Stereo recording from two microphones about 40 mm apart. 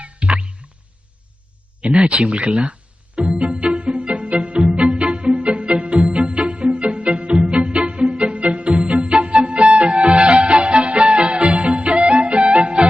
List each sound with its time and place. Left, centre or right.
0.0 s music: right
1.8 s speech: right
3.2 s music: right